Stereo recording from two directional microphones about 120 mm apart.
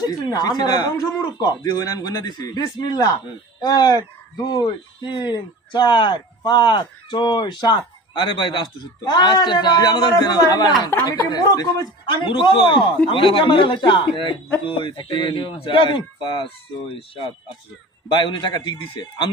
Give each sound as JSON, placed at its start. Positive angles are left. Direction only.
{"t": 0.0, "sound": "speech", "side_deg": 35}
{"t": 12.1, "sound": "a man's voice", "side_deg": 40}
{"t": 18.0, "sound": "speech", "side_deg": 40}